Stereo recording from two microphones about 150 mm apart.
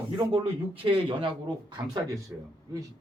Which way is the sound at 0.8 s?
35° right (ahead or behind).